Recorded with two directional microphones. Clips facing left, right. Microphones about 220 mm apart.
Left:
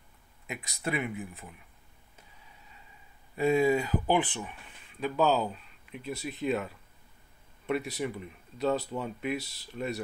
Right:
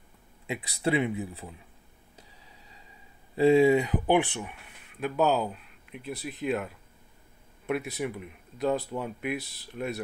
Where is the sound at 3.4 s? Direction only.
25° right (ahead or behind); by 6.7 s 5° right (ahead or behind).